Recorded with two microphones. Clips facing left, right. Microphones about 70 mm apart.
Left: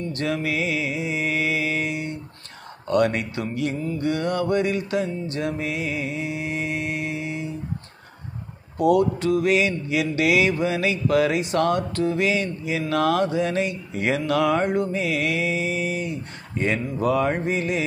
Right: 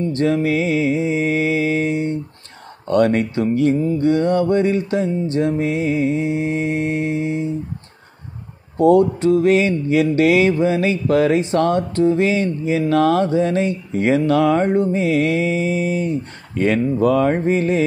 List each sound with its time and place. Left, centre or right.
0.0 s mantra: right
8.7 s mantra: right
16.5 s mantra: right